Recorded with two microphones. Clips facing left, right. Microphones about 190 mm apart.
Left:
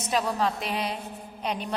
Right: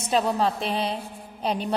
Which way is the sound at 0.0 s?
30° right (ahead or behind).